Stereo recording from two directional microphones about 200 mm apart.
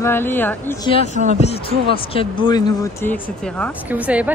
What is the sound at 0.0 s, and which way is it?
Speech, 10° left (ahead or behind).